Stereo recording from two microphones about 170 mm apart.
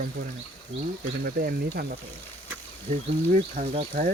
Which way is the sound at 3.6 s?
40° right (ahead or behind).